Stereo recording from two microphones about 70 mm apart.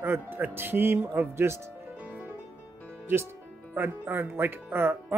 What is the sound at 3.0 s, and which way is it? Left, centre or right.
Speech, right.